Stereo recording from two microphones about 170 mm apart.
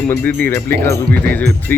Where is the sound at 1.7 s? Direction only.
10° left (ahead or behind).